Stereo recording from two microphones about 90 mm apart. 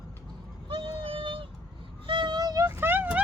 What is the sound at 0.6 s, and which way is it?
Child singing, 70° right (ahead or behind).